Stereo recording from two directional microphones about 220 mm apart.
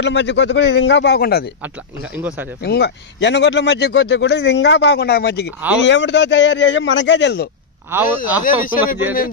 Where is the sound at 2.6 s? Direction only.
50° left (ahead or behind).